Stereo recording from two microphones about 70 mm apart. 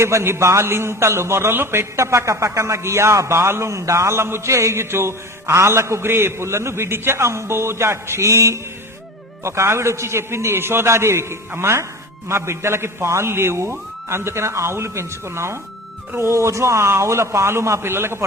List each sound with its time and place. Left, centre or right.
0.0 s a man's voice: right